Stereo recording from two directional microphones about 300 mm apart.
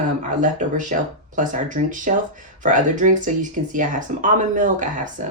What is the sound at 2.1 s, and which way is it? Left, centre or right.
Speech, right.